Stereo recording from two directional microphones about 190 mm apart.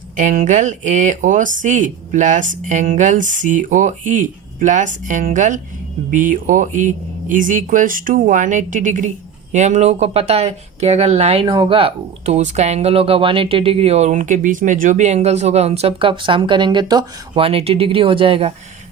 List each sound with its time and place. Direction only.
0.2 s speech: 40° right (ahead or behind)